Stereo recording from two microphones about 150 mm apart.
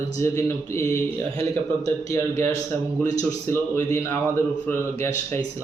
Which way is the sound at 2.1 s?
20° left (ahead or behind).